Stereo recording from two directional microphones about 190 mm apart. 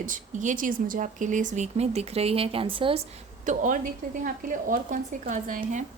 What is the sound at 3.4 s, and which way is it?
A woman's voice, 40° right (ahead or behind).